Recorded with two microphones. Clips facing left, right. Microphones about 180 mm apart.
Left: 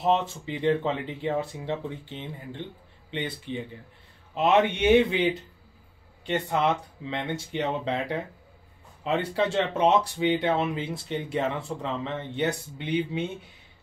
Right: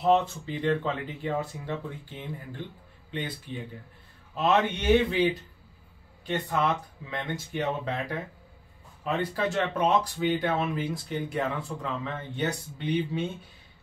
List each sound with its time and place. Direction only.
0.0 s speech: 25° left (ahead or behind)